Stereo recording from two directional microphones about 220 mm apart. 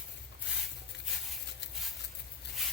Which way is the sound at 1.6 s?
50° left (ahead or behind).